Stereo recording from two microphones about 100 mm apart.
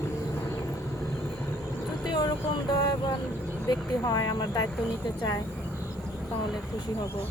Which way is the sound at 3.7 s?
40° left (ahead or behind).